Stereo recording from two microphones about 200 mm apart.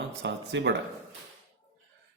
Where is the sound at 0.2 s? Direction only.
60° right (ahead or behind).